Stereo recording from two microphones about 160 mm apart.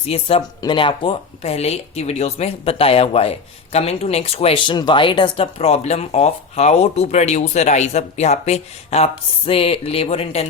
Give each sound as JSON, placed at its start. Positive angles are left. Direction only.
{"t": 0.0, "sound": "speech", "side_deg": 35}